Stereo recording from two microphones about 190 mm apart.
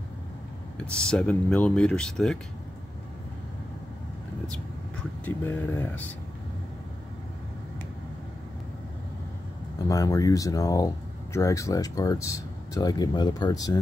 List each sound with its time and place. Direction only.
0.7 s speech: 5° left (ahead or behind)
5.2 s speech: 10° left (ahead or behind)
9.8 s speech: 20° left (ahead or behind)